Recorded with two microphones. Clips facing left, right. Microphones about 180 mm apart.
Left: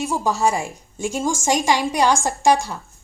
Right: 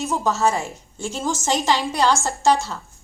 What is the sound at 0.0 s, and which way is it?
A woman's voice, 10° left (ahead or behind).